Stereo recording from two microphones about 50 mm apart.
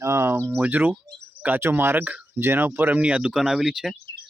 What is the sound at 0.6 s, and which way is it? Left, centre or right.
Speech, right.